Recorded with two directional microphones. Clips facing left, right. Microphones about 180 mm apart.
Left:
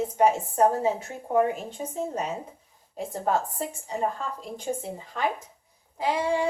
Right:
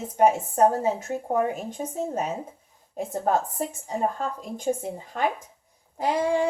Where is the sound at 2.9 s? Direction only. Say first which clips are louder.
Right 2 dB; 45° right (ahead or behind).